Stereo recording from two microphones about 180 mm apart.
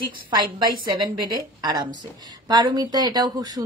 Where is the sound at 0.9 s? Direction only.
25° right (ahead or behind).